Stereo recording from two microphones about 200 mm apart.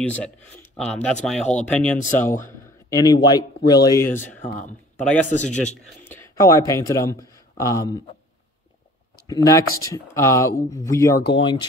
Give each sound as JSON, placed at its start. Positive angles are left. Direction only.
{"t": 0.0, "sound": "speech", "side_deg": 5}
{"t": 2.9, "sound": "speech", "side_deg": 20}
{"t": 5.4, "sound": "a man's voice", "side_deg": 35}
{"t": 6.0, "sound": "a sound", "side_deg": 10}
{"t": 6.7, "sound": "speech", "side_deg": 15}
{"t": 9.3, "sound": "speech", "side_deg": 15}